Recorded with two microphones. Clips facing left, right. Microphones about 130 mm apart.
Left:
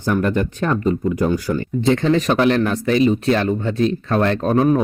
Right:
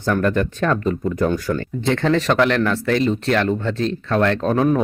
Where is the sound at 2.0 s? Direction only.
75° right (ahead or behind).